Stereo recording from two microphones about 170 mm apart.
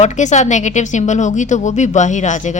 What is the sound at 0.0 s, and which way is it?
Speech, 45° left (ahead or behind).